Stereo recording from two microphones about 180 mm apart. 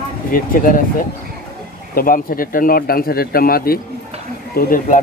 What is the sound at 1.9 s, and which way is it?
Speech, 50° left (ahead or behind).